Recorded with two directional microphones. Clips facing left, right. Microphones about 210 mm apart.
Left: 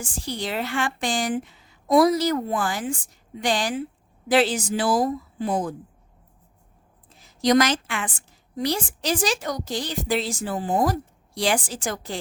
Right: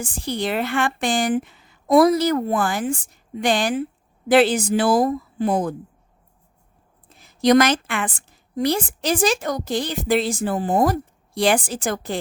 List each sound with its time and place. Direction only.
0.0 s a woman's voice: 60° right (ahead or behind)
7.1 s a woman's voice: 60° right (ahead or behind)